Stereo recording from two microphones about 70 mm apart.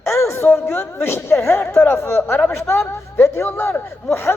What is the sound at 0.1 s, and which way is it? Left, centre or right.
Speech, left.